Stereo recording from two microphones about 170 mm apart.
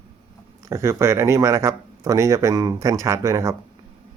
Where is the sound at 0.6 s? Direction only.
15° right (ahead or behind).